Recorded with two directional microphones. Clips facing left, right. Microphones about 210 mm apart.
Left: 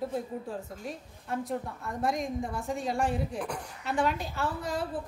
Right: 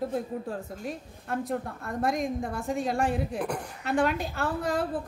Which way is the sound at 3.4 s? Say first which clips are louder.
Right 4 dB; 55° right (ahead or behind).